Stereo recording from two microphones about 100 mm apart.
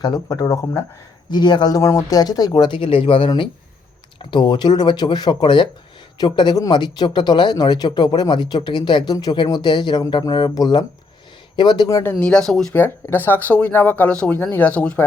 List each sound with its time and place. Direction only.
0.0 s speech: 40° left (ahead or behind)
1.3 s speech: 45° left (ahead or behind)
11.9 s speech: 30° left (ahead or behind)
12.2 s speech: 5° left (ahead or behind)
12.7 s speech: 20° left (ahead or behind)